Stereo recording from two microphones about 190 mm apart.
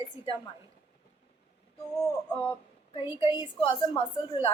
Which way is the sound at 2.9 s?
25° left (ahead or behind).